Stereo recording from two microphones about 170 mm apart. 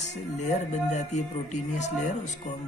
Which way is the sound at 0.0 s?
40° left (ahead or behind).